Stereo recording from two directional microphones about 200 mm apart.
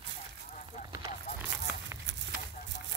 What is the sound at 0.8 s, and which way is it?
Run, 20° right (ahead or behind).